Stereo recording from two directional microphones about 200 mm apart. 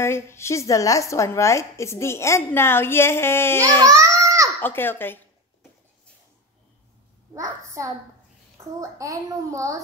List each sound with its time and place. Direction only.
0.0 s a woman's voice: 15° left (ahead or behind)
3.8 s a sound: 15° right (ahead or behind)
4.6 s a woman's voice: 10° left (ahead or behind)
7.3 s a child's voice: 15° right (ahead or behind)